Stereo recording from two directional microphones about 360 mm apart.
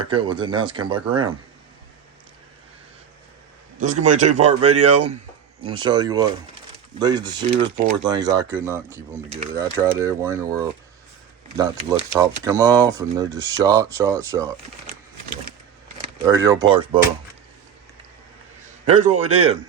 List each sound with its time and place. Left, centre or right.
0.0 s speech: centre
3.8 s speech: centre
16.0 s speech: centre
18.9 s speech: centre